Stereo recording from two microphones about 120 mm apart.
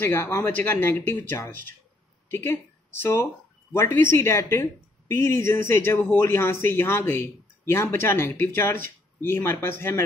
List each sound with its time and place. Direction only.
0.0 s speech: 15° left (ahead or behind)
2.3 s a woman's voice: 20° left (ahead or behind)